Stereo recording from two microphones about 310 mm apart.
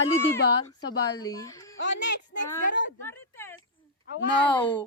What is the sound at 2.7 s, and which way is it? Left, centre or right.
Speech, left.